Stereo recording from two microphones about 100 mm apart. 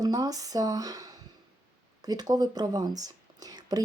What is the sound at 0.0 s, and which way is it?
Speech, 35° right (ahead or behind).